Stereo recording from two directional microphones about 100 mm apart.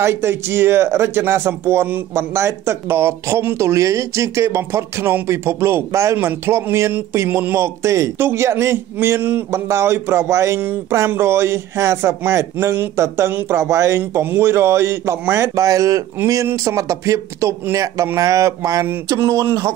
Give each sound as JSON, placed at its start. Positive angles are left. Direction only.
{"t": 0.0, "sound": "a man's voice", "side_deg": -25}